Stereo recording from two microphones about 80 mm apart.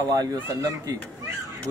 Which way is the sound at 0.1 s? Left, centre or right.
Right.